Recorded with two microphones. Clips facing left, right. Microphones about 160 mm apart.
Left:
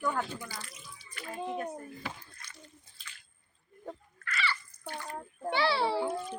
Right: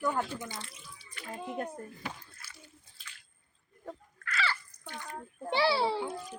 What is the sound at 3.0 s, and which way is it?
Drip, 5° right (ahead or behind).